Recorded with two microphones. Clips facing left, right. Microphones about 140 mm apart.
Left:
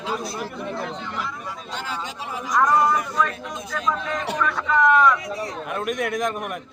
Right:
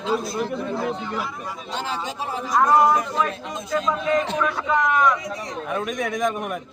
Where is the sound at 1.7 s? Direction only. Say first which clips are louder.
Right 4 dB; 20° right (ahead or behind).